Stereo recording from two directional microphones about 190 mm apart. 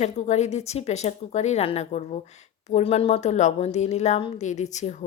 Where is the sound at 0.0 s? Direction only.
35° left (ahead or behind).